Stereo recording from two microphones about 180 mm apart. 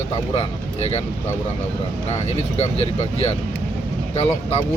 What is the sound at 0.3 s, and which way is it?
Speech, 35° left (ahead or behind).